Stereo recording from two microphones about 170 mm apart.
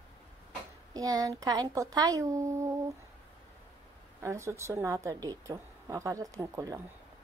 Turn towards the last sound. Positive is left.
turn(degrees=-20)  # may be behind; listen again after turning